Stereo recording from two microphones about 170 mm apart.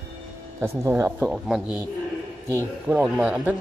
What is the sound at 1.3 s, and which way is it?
Speech, 5° right (ahead or behind).